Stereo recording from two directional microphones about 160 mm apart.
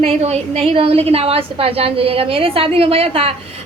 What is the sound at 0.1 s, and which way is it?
A woman's voice, 40° right (ahead or behind).